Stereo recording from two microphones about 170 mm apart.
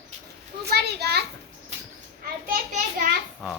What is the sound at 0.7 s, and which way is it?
Speech, 75° right (ahead or behind).